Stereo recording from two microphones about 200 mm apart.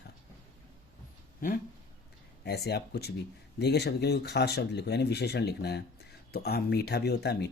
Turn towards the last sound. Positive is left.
turn(degrees=55)  # may be behind; listen again after turning